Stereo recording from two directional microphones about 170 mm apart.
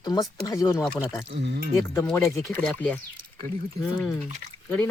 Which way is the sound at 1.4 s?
80° right.